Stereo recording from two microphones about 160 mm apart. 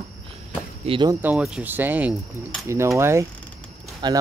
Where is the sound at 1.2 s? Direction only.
5° right (ahead or behind).